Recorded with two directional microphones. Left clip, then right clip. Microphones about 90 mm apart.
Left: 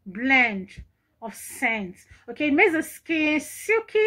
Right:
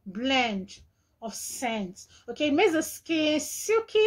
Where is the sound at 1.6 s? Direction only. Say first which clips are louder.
Left 6 dB; 45° right (ahead or behind).